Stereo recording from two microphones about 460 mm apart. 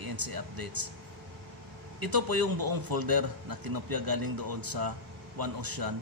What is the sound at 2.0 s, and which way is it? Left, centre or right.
A man's voice, right.